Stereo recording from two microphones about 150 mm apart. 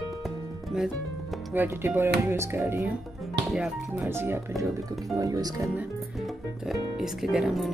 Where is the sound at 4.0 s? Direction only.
15° right (ahead or behind).